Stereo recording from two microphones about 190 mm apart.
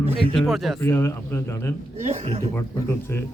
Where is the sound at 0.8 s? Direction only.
15° left (ahead or behind).